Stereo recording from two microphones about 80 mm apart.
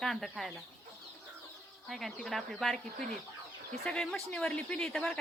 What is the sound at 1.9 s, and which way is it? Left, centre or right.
Speech, centre.